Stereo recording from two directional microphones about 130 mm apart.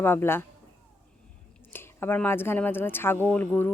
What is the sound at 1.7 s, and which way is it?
Speech, 15° left (ahead or behind).